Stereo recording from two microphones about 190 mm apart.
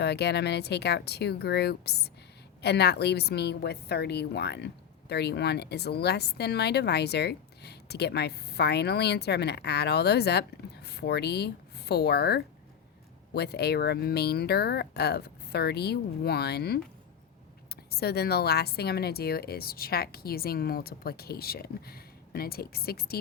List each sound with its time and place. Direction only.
0.0 s a woman's voice: 60° left (ahead or behind)
17.9 s a woman's voice: 55° left (ahead or behind)